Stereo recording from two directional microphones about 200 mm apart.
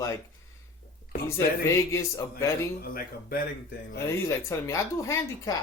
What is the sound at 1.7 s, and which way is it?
Speech, 15° left (ahead or behind).